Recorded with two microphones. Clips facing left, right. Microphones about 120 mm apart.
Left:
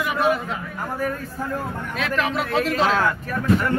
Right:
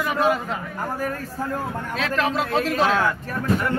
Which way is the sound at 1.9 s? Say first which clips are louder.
Right 1 dB; 35° right (ahead or behind).